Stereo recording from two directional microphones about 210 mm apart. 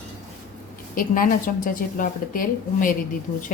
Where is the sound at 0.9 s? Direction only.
40° left (ahead or behind).